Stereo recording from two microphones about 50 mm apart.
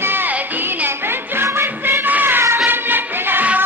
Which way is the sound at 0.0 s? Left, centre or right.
Right.